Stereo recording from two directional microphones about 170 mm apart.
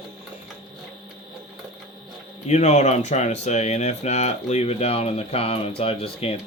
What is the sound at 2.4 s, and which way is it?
Speech, 40° left (ahead or behind).